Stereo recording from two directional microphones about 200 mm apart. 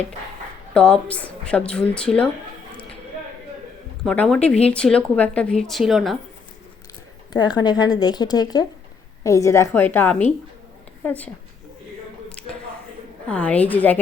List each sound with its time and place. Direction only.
0.7 s a woman's voice: 5° left (ahead or behind)
4.0 s a woman's voice: 5° left (ahead or behind)
7.3 s a woman's voice: 20° left (ahead or behind)
13.2 s a woman's voice: 5° left (ahead or behind)